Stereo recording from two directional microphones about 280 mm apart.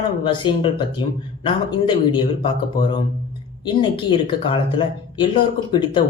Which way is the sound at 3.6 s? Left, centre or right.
Centre.